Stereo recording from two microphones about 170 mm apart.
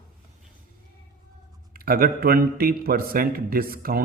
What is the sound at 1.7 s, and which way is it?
A man's voice, 60° right (ahead or behind).